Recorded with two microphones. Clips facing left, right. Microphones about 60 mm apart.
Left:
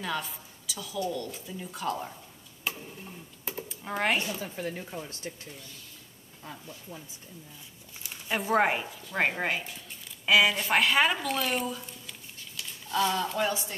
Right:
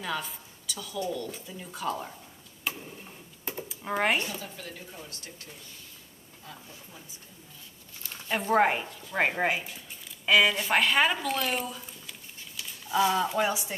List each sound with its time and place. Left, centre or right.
0.0 s a woman's voice: centre
2.7 s tick-tock: centre
3.0 s sewing machine: centre
4.4 s speech: left
8.3 s speech: centre